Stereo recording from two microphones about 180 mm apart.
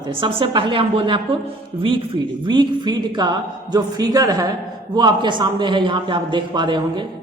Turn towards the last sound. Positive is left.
turn(degrees=-25)  # may be behind; listen again after turning